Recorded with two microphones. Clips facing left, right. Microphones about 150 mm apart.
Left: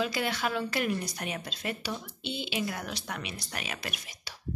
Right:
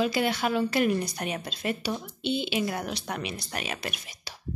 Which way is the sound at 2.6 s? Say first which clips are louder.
Right 4 dB; 30° right (ahead or behind).